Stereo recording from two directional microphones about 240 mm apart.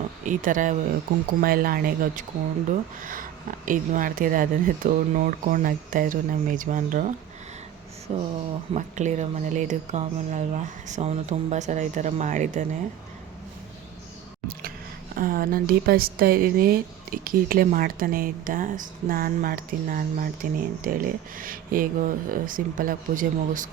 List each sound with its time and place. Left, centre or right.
0.3 s a woman's voice: right
8.1 s speech: right
15.1 s a woman's voice: right